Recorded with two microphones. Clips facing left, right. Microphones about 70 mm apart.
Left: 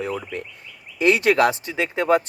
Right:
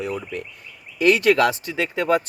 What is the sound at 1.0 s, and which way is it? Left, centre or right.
Speech, left.